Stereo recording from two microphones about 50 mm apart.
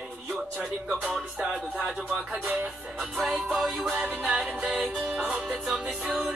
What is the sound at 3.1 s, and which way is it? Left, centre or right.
Music, centre.